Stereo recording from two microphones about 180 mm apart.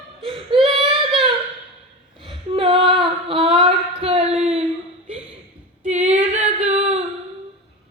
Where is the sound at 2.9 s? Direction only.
30° right (ahead or behind).